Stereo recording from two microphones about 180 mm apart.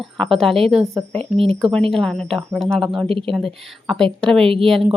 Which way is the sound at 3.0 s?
30° right (ahead or behind).